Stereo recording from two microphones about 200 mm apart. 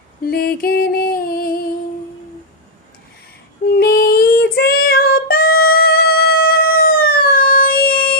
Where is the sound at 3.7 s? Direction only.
50° left (ahead or behind).